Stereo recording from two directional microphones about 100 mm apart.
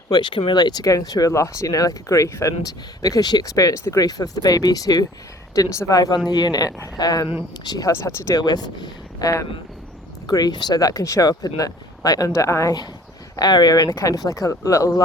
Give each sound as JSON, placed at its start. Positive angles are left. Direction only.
{"t": 0.1, "sound": "speech", "side_deg": 50}
{"t": 8.4, "sound": "speech", "side_deg": 45}
{"t": 13.3, "sound": "speech", "side_deg": 45}